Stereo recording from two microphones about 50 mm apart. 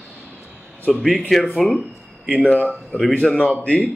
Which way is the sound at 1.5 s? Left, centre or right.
Centre.